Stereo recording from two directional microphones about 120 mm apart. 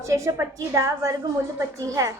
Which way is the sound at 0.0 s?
25° right (ahead or behind).